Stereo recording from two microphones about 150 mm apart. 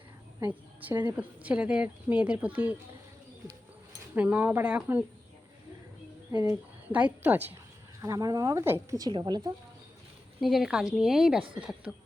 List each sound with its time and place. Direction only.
1.0 s speech: 10° right (ahead or behind)
4.1 s speech: 10° right (ahead or behind)
6.3 s speech: 25° right (ahead or behind)
6.8 s speech: 10° right (ahead or behind)
8.0 s speech: 25° right (ahead or behind)
10.4 s a woman's voice: centre (ahead or behind)